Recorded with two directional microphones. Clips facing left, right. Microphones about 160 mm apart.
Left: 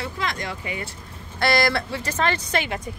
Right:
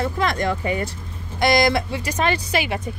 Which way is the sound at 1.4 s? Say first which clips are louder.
Right 4 dB; 15° right (ahead or behind).